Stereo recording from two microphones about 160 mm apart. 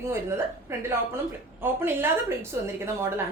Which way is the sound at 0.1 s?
15° right (ahead or behind).